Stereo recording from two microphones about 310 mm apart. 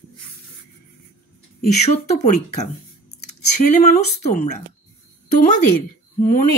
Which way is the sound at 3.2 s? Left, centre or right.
Left.